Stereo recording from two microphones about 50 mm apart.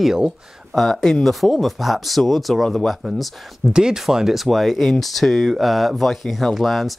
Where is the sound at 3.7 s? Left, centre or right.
Centre.